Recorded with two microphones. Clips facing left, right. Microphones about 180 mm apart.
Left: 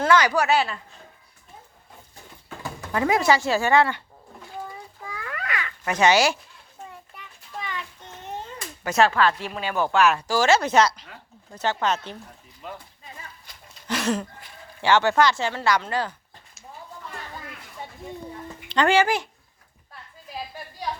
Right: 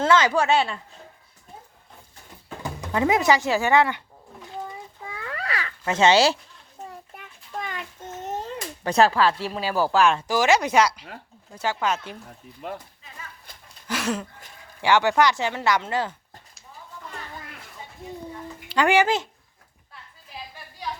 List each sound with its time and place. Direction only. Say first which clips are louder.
0.0 s a woman's voice: even; 25° right (ahead or behind)
2.6 s speech: right 1 dB; 20° right (ahead or behind)
4.4 s a sound: right 1 dB; 20° right (ahead or behind)
6.9 s a sound: right 2 dB; 45° right (ahead or behind)
9.4 s speech: right 2 dB; 35° right (ahead or behind); by 12.1 s 10° right (ahead or behind)
13.8 s speech: left 2 dB; 5° right (ahead or behind)
18.7 s speech: even; 10° right (ahead or behind)